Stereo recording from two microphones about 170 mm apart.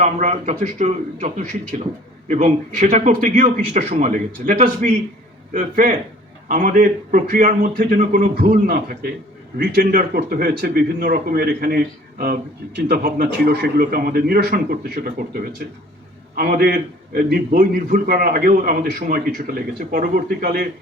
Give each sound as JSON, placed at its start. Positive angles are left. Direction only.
{"t": 0.0, "sound": "a man's voice", "side_deg": -45}
{"t": 8.6, "sound": "speech", "side_deg": -65}
{"t": 9.6, "sound": "a man's voice", "side_deg": -55}